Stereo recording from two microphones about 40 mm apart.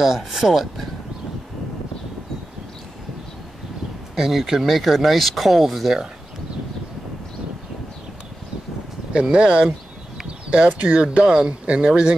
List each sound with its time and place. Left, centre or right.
0.0 s speech: centre
4.1 s speech: centre
9.1 s speech: right